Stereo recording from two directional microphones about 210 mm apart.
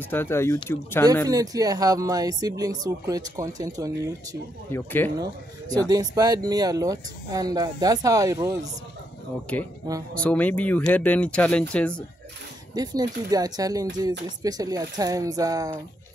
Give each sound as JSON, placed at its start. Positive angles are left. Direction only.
{"t": 0.1, "sound": "speech", "side_deg": 10}
{"t": 1.3, "sound": "speech", "side_deg": -15}
{"t": 4.7, "sound": "speech", "side_deg": 10}
{"t": 5.2, "sound": "speech", "side_deg": -20}
{"t": 9.5, "sound": "speech", "side_deg": 5}
{"t": 12.7, "sound": "speech", "side_deg": -20}